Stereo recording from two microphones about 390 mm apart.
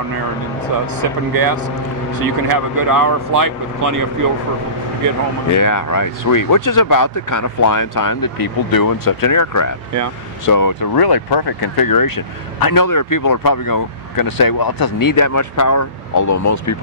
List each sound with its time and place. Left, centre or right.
1.3 s speech: right
5.5 s speech: left